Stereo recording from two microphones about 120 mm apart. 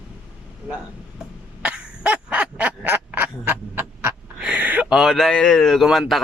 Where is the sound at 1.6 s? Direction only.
10° right (ahead or behind).